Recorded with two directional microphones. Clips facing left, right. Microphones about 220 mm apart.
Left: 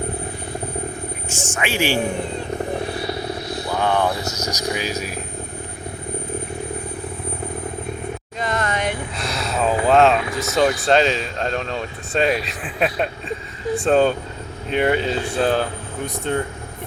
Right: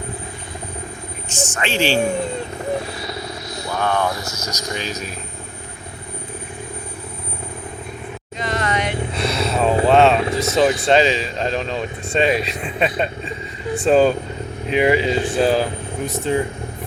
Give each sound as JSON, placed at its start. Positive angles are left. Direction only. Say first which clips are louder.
{"t": 1.3, "sound": "speech", "louder": "right 2 dB", "side_deg": 10}
{"t": 3.7, "sound": "speech", "louder": "left 1 dB", "side_deg": 15}
{"t": 8.4, "sound": "a sound", "louder": "right 1 dB", "side_deg": 50}
{"t": 9.1, "sound": "a sound", "louder": "right 4 dB", "side_deg": 0}
{"t": 9.9, "sound": "vehicle", "louder": "right 1 dB", "side_deg": 0}
{"t": 10.2, "sound": "vehicle", "louder": "right 4 dB", "side_deg": -30}
{"t": 10.5, "sound": "speech", "louder": "right 1 dB", "side_deg": 0}